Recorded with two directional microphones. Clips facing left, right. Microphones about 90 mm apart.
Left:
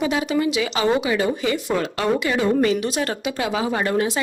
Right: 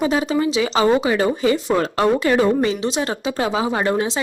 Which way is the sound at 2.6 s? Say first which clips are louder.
Even; 25° right (ahead or behind).